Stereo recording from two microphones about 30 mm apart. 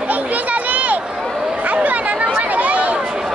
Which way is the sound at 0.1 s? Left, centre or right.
Right.